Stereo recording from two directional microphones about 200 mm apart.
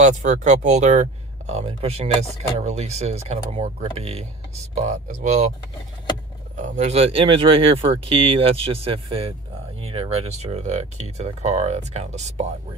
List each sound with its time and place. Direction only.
0.0 s speech: 40° right (ahead or behind)
6.5 s speech: 35° right (ahead or behind)